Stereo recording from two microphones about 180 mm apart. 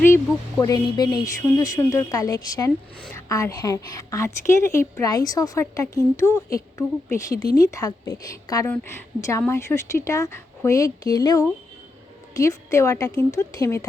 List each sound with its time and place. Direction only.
0.6 s a woman's voice: 20° left (ahead or behind)